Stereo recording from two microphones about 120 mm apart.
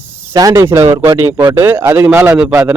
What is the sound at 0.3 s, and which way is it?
Speech, 30° right (ahead or behind).